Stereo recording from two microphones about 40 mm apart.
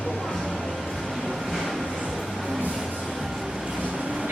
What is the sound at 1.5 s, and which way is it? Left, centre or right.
Train, centre.